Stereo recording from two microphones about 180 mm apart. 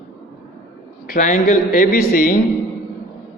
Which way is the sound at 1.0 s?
50° left (ahead or behind).